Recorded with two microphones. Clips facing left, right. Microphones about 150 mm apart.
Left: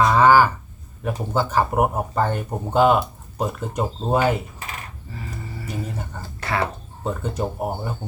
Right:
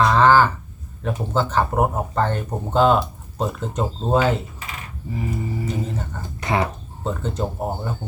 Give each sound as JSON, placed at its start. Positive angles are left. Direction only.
{"t": 0.0, "sound": "a sound", "side_deg": 10}
{"t": 1.0, "sound": "speech", "side_deg": 10}
{"t": 5.1, "sound": "music", "side_deg": -15}
{"t": 6.2, "sound": "speech", "side_deg": -20}
{"t": 7.0, "sound": "speech", "side_deg": 10}